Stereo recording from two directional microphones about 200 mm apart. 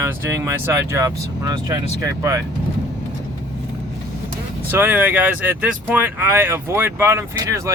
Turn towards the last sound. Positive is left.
turn(degrees=-15)  # may be behind; listen again after turning